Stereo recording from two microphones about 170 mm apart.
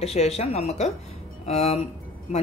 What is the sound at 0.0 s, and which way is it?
Speech, 40° left (ahead or behind).